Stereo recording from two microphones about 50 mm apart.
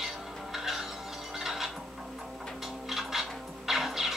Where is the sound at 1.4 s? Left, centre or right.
Centre.